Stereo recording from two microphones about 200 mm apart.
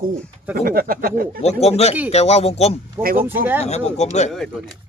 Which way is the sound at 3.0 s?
15° right (ahead or behind).